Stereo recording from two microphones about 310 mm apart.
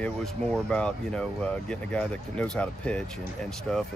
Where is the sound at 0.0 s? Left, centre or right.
Centre.